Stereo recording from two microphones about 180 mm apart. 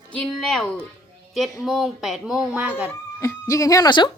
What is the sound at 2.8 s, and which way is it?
Speech, 15° left (ahead or behind).